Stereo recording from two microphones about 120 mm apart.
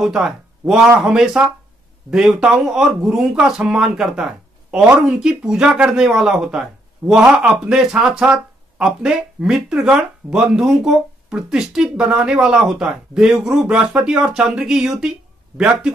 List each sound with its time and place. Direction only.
0.0 s speech: 5° right (ahead or behind)